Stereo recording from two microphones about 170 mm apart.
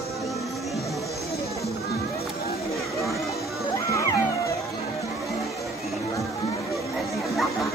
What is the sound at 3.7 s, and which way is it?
Music, 20° left (ahead or behind).